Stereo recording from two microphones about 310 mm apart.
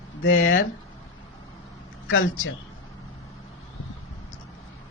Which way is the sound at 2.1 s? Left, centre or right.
Left.